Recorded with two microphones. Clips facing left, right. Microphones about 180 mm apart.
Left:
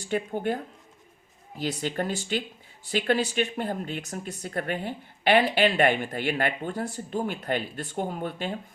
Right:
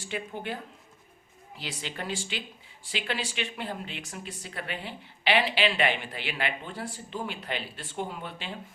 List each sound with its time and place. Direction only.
0.1 s speech: 50° left (ahead or behind)